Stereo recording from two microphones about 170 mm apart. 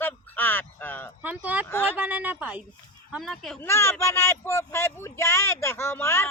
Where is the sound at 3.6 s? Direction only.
15° left (ahead or behind).